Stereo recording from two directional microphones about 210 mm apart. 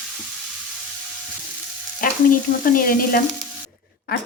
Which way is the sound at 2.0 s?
40° left (ahead or behind).